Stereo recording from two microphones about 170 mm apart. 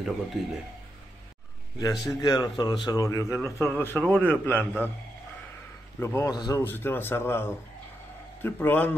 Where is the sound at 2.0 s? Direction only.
20° left (ahead or behind).